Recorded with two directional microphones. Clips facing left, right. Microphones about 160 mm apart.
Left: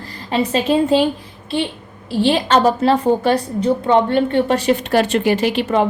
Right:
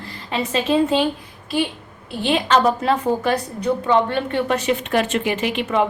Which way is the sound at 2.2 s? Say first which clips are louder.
Left 3 dB; 35° left (ahead or behind).